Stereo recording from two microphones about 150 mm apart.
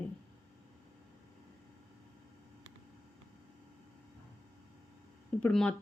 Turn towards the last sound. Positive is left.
turn(degrees=5)  # may be behind; listen again after turning